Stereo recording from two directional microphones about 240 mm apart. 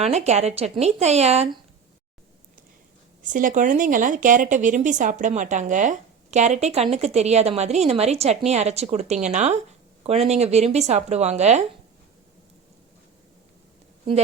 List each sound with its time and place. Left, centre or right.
0.0 s a woman's voice: right
3.2 s a woman's voice: right